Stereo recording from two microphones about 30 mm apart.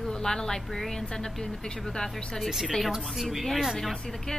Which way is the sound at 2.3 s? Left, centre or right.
Centre.